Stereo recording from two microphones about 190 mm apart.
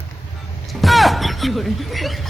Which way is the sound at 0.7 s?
Centre (ahead or behind).